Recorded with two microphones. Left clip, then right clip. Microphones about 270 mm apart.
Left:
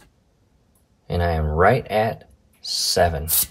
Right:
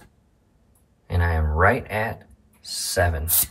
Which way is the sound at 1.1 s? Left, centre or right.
Centre.